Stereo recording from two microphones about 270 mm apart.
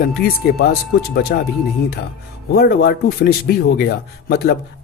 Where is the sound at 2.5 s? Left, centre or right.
Left.